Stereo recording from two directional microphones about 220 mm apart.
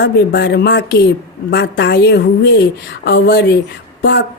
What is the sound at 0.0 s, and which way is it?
Speech, 50° left (ahead or behind).